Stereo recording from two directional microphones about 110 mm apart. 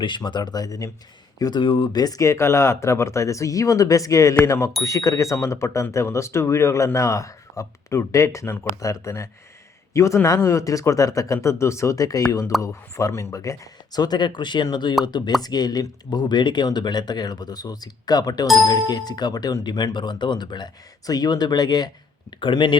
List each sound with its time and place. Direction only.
0.0 s a man's voice: 45° left (ahead or behind)